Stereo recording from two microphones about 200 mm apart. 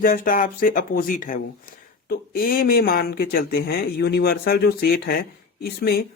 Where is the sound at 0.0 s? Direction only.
45° left (ahead or behind).